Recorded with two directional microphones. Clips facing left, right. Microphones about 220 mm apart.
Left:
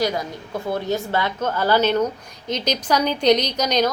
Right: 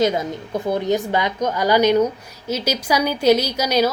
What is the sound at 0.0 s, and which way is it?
A woman's voice, 20° right (ahead or behind).